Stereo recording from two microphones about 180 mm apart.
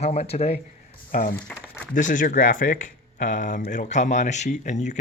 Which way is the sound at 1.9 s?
45° left (ahead or behind).